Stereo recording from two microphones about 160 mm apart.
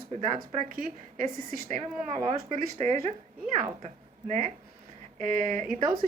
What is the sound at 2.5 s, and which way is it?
Speech, 45° right (ahead or behind).